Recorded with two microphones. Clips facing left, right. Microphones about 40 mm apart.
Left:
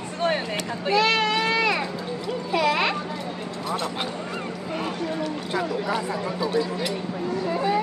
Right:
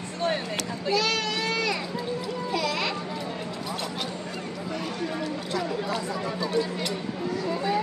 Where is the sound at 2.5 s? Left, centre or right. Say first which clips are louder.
Left 7 dB; left.